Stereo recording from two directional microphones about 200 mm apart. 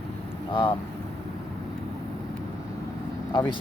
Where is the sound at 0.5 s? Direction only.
25° left (ahead or behind).